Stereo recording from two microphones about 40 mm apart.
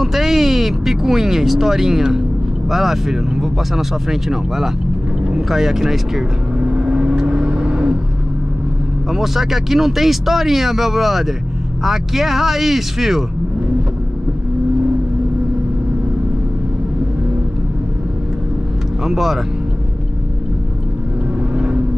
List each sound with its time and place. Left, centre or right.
0.0 s speech: centre
6.6 s vehicle: right
9.1 s speech: centre
19.0 s speech: centre